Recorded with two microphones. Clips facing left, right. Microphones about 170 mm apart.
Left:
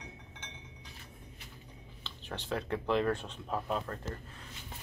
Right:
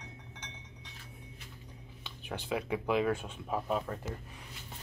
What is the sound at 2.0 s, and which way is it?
Speech, 10° right (ahead or behind).